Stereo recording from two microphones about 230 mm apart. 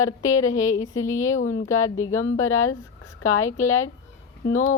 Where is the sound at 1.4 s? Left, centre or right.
Left.